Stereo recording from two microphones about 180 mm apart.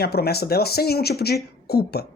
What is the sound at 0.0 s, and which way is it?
A woman's voice, 60° left (ahead or behind).